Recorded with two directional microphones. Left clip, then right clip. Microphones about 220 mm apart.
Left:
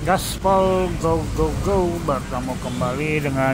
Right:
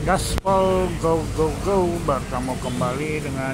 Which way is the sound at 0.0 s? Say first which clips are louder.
Left 2 dB; 5° left (ahead or behind).